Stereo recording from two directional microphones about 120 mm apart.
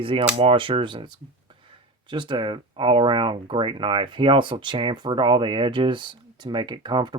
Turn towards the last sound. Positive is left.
turn(degrees=-40)  # may be behind; listen again after turning